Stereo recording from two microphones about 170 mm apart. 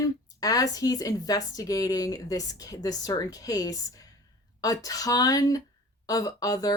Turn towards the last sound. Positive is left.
turn(degrees=20)  # may be behind; listen again after turning